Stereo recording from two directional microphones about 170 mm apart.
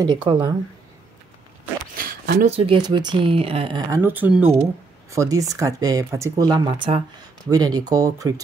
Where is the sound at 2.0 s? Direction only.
60° right (ahead or behind).